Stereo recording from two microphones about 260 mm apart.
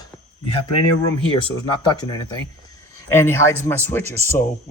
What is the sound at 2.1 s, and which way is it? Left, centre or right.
Speech, centre.